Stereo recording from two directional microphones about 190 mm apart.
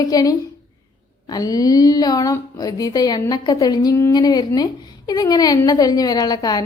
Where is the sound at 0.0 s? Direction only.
20° left (ahead or behind).